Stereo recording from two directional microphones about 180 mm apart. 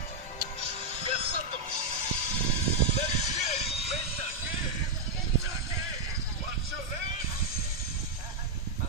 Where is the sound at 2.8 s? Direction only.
40° left (ahead or behind).